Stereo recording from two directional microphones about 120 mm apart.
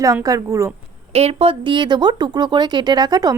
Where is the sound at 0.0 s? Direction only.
30° right (ahead or behind).